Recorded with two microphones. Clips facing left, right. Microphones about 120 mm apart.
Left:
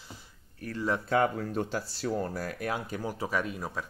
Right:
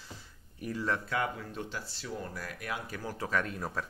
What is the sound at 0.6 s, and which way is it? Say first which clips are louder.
Speech: right 1 dB; 15° right (ahead or behind).